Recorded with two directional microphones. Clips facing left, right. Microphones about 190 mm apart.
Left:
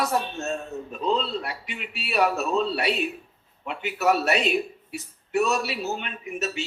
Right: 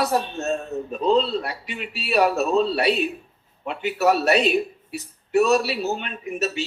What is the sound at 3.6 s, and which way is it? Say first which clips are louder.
A man's voice: right 3 dB; 35° right (ahead or behind).